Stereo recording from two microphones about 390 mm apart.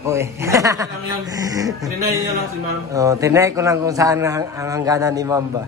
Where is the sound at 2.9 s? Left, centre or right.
Centre.